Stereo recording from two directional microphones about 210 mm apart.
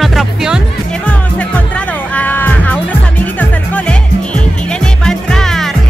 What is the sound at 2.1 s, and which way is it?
Music, 10° left (ahead or behind).